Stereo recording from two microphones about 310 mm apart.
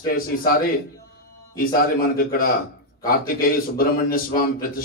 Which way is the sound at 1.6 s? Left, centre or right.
Left.